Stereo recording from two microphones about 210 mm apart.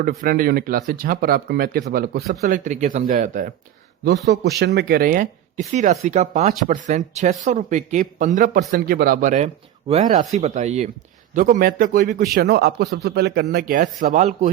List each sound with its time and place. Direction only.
0.0 s speech: 45° right (ahead or behind)
4.0 s speech: 50° right (ahead or behind); by 14.5 s 35° right (ahead or behind)